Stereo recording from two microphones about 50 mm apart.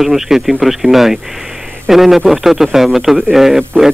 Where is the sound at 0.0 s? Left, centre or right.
Centre.